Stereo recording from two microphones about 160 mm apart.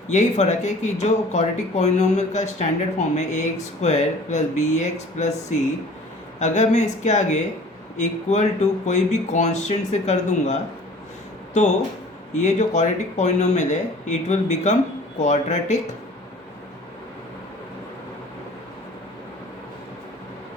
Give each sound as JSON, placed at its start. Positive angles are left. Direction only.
{"t": 0.1, "sound": "speech", "side_deg": 45}
{"t": 6.4, "sound": "speech", "side_deg": 45}
{"t": 12.3, "sound": "speech", "side_deg": 45}